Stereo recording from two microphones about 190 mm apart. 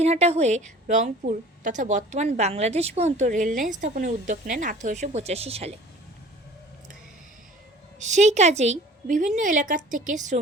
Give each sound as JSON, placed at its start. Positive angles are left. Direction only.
{"t": 0.0, "sound": "a woman's voice", "side_deg": -35}
{"t": 7.9, "sound": "a woman's voice", "side_deg": -40}